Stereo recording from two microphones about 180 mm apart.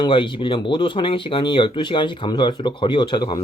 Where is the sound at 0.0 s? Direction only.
25° left (ahead or behind).